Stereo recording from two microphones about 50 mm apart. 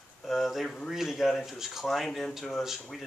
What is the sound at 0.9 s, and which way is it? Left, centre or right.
Speech, centre.